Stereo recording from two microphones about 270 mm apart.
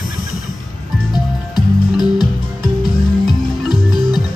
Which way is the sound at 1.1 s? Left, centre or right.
Centre.